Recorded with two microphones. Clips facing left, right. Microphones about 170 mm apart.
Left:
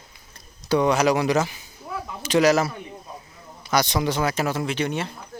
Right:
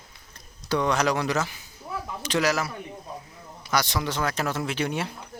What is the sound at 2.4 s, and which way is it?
Speech, 25° left (ahead or behind).